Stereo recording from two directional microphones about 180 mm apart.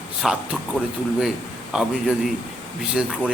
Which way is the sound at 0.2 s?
5° right (ahead or behind).